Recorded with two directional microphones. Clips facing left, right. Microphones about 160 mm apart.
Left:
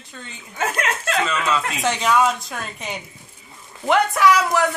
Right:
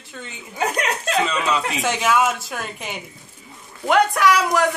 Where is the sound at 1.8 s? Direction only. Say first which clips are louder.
Left 1 dB; centre (ahead or behind).